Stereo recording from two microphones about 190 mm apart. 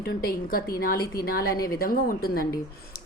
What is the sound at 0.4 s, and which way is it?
A woman's voice, 50° left (ahead or behind).